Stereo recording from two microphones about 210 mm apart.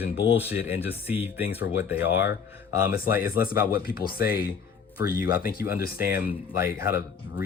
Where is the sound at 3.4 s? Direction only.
45° left (ahead or behind).